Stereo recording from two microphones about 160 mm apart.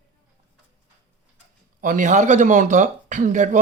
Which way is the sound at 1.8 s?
50° right (ahead or behind).